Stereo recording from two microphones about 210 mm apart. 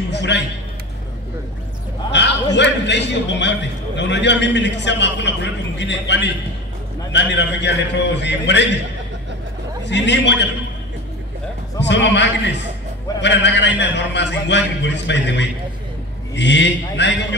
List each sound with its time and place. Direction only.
0.1 s a man's voice: 55° left (ahead or behind)
2.0 s a man's voice: 55° left (ahead or behind)
9.8 s a man's voice: 55° left (ahead or behind)
11.8 s a man's voice: 55° left (ahead or behind)